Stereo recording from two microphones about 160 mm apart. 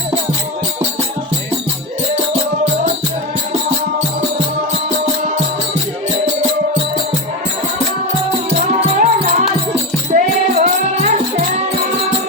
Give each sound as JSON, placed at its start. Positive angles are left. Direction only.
{"t": 8.5, "sound": "music", "side_deg": -45}